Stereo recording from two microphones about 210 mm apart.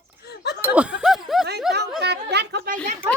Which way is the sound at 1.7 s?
Centre (ahead or behind).